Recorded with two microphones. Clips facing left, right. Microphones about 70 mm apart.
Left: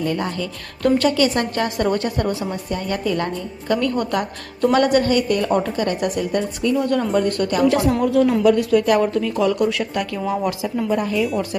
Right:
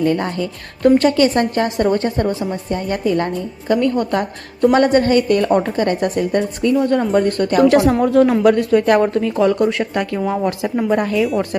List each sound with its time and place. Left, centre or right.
0.0 s speech: right
0.8 s a woman's voice: right
10.8 s a woman's voice: right